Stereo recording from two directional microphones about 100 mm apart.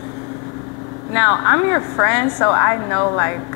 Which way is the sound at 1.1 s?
25° left (ahead or behind).